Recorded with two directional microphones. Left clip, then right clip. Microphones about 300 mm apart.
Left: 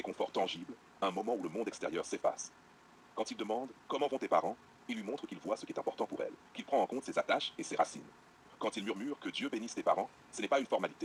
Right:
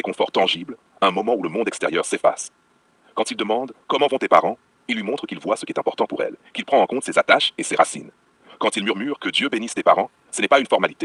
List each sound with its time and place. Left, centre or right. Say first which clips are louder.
0.0 s speech: right 16 dB; right